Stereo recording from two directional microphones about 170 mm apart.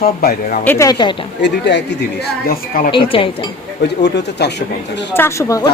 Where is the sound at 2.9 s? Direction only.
30° left (ahead or behind).